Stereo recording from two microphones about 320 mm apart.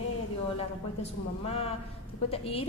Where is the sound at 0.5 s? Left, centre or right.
Centre.